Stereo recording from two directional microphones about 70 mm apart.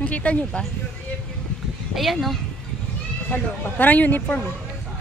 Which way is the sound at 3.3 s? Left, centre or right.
Left.